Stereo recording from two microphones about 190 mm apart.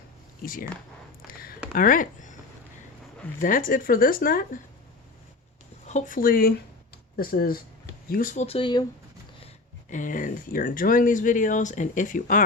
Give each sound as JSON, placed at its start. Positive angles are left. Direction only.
{"t": 1.3, "sound": "a sound", "side_deg": 50}
{"t": 1.7, "sound": "speech", "side_deg": 45}
{"t": 3.4, "sound": "speech", "side_deg": 45}
{"t": 5.8, "sound": "speech", "side_deg": 40}
{"t": 9.9, "sound": "speech", "side_deg": 45}